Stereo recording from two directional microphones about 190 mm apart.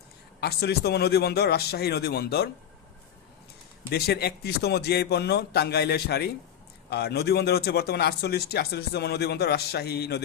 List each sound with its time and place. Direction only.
0.3 s speech: 55° left (ahead or behind)
3.8 s speech: 55° left (ahead or behind)